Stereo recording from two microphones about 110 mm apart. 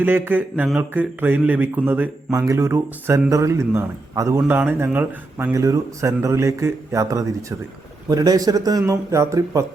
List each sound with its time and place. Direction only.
0.0 s speech: 15° right (ahead or behind)
2.3 s speech: 30° right (ahead or behind)
4.4 s speech: 15° right (ahead or behind)
5.5 s a man's voice: 30° right (ahead or behind)